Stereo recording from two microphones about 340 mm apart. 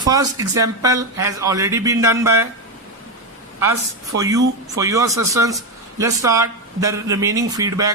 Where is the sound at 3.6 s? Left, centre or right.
Centre.